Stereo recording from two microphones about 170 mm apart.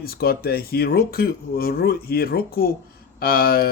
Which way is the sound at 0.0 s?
65° left (ahead or behind).